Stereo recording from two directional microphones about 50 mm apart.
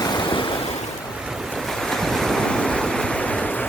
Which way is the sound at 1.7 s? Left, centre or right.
Centre.